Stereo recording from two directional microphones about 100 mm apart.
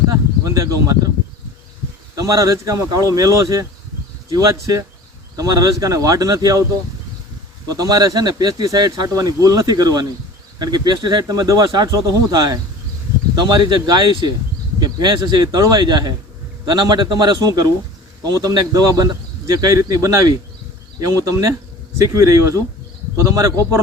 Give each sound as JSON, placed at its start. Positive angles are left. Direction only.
{"t": 0.1, "sound": "speech", "side_deg": -30}
{"t": 2.1, "sound": "speech", "side_deg": -30}
{"t": 7.7, "sound": "speech", "side_deg": -40}